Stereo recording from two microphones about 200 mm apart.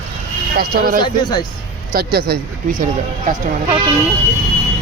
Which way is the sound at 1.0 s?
20° left (ahead or behind).